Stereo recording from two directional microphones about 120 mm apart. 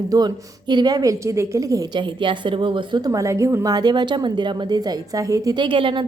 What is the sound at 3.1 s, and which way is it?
A woman's voice, 25° right (ahead or behind).